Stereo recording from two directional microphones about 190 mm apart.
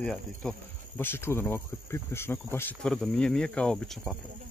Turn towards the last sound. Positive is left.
turn(degrees=0)  # may be behind; listen again after turning